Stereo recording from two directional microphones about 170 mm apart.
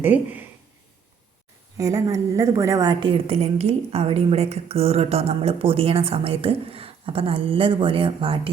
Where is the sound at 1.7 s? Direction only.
20° right (ahead or behind).